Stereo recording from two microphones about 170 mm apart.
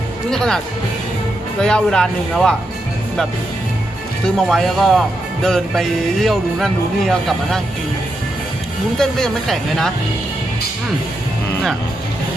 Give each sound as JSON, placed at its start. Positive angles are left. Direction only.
{"t": 0.3, "sound": "speech", "side_deg": 5}
{"t": 1.6, "sound": "speech", "side_deg": 5}
{"t": 4.4, "sound": "speech", "side_deg": 0}
{"t": 9.0, "sound": "speech", "side_deg": 0}